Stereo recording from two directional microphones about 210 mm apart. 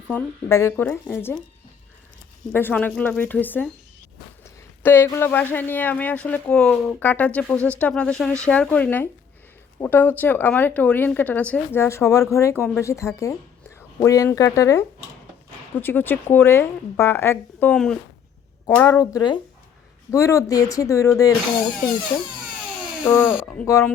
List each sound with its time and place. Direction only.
0.1 s speech: 10° left (ahead or behind)
2.5 s a woman's voice: 10° left (ahead or behind)
23.6 s speech: 15° left (ahead or behind)